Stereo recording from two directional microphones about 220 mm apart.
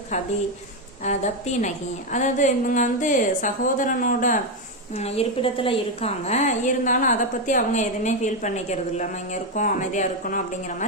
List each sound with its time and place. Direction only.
1.0 s a woman's voice: 30° left (ahead or behind)